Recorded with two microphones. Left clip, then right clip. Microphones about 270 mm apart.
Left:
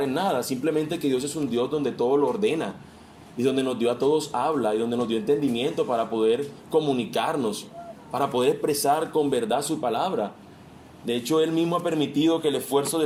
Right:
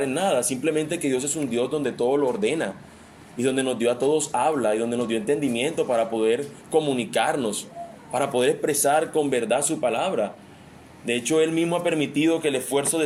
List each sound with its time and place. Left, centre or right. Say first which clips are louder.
0.0 s a man's voice: right 2 dB; centre